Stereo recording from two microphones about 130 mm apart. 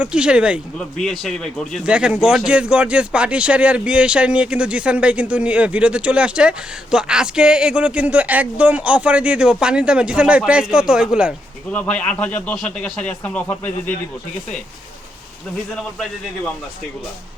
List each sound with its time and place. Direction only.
0.0 s speech: 5° right (ahead or behind)
0.8 s a man's voice: 5° left (ahead or behind)
1.8 s speech: 5° right (ahead or behind)
11.7 s speech: 10° left (ahead or behind)